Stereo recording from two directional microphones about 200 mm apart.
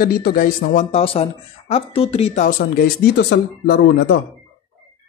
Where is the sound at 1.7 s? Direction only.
30° left (ahead or behind).